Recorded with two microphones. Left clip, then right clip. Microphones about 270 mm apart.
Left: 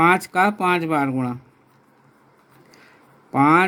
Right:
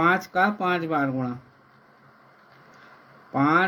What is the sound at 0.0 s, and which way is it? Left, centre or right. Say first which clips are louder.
Speech: left 4 dB; left.